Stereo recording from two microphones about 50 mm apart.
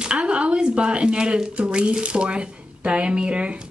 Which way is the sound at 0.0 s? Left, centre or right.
Centre.